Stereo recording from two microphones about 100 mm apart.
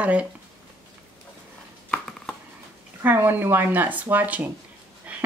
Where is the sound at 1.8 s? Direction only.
10° left (ahead or behind).